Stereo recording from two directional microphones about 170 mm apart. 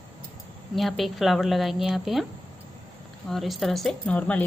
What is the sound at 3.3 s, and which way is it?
A woman's voice, centre (ahead or behind).